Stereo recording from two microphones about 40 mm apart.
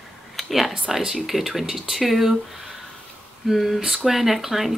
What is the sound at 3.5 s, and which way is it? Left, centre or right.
Speech, centre.